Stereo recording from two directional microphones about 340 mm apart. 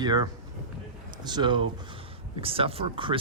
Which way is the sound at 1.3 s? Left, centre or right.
Centre.